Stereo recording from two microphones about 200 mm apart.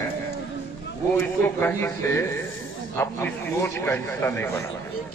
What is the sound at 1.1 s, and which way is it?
A man's voice, 10° left (ahead or behind).